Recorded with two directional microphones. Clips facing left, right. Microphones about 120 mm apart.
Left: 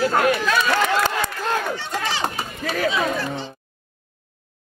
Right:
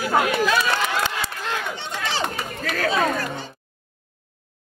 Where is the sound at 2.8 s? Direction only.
40° right (ahead or behind).